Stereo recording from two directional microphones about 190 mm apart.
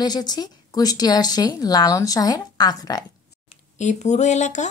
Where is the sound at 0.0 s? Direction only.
20° left (ahead or behind).